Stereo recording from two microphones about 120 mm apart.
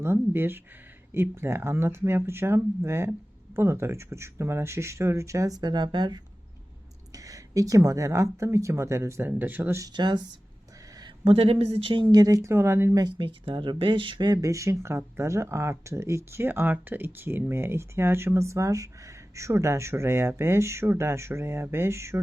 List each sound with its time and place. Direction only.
0.0 s speech: 20° right (ahead or behind); by 6.2 s 40° right (ahead or behind)
7.1 s speech: 30° right (ahead or behind)
9.8 s speech: 40° right (ahead or behind)
11.0 s speech: 50° right (ahead or behind)
12.1 s speech: 30° right (ahead or behind)
13.1 s speech: 45° right (ahead or behind); by 22.2 s 20° right (ahead or behind)